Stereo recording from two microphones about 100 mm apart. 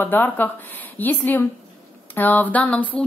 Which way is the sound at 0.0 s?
20° left (ahead or behind).